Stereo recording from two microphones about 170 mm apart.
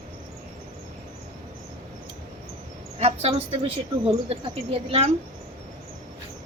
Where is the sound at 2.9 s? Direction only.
40° right (ahead or behind).